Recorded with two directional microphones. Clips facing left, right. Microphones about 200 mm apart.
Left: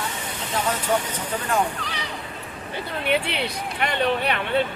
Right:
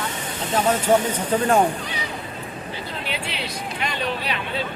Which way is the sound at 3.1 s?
60° left (ahead or behind).